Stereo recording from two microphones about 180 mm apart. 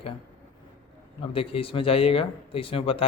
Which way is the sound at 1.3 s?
30° left (ahead or behind).